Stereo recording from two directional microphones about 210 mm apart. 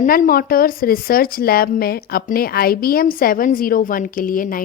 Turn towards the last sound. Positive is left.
turn(degrees=40)  # may be behind; listen again after turning